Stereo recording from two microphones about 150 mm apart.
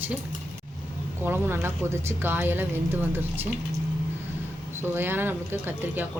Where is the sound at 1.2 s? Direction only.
15° right (ahead or behind).